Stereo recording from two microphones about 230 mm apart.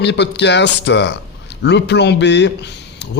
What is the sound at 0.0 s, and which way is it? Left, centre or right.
A man's voice, left.